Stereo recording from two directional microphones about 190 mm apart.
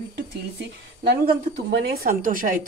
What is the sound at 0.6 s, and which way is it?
A man's voice, 55° right (ahead or behind).